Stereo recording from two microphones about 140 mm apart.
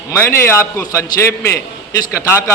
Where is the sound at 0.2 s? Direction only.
15° left (ahead or behind).